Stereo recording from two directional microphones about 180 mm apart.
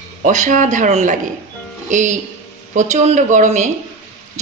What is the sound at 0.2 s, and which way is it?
A woman's voice, 45° right (ahead or behind).